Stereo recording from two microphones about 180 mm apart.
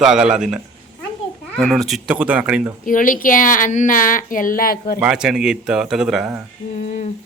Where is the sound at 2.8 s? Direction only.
45° left (ahead or behind).